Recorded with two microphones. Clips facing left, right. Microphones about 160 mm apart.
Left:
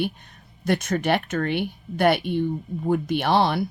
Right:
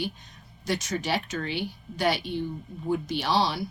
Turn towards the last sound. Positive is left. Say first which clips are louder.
# left 5 dB
turn(degrees=55)  # may be behind; listen again after turning